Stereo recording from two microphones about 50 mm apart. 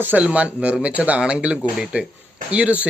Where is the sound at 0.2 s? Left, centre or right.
Right.